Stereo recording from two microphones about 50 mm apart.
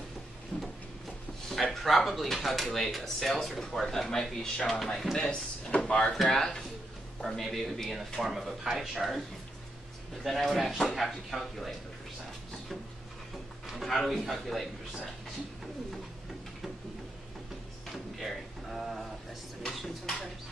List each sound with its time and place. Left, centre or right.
1.5 s speech: centre; by 6.1 s left
7.2 s speech: centre
10.2 s speech: centre
13.7 s speech: centre
17.9 s a sound: centre
19.6 s a sound: centre